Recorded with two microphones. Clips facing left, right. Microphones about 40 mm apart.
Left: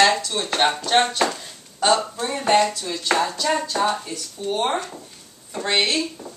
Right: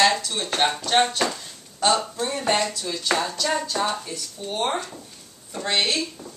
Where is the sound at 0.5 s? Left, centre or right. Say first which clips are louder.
Left 2 dB; centre.